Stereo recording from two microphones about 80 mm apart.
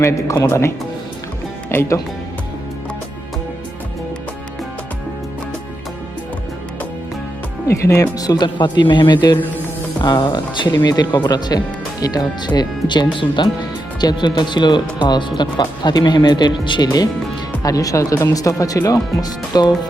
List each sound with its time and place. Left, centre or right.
0.4 s speech: left
1.7 s speech: left
7.7 s speech: left
8.2 s speech: left
10.8 s speech: left